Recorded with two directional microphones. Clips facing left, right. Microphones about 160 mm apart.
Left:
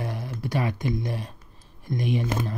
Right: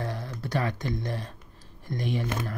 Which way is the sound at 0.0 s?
10° left (ahead or behind).